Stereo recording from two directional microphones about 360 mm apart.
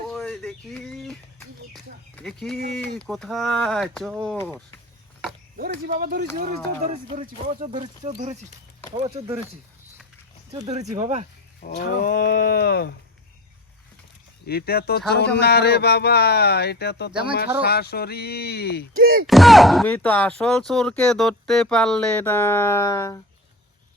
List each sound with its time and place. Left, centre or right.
0.1 s bird: centre
2.1 s speech: centre
5.5 s speech: right
10.5 s speech: centre
11.6 s speech: left
14.4 s speech: left
18.9 s speech: right
19.3 s speech: centre